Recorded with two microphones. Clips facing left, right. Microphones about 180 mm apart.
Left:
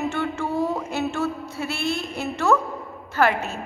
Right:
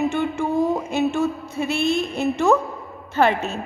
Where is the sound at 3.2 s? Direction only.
25° right (ahead or behind).